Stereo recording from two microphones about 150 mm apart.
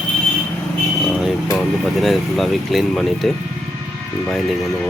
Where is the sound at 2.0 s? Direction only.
Centre (ahead or behind).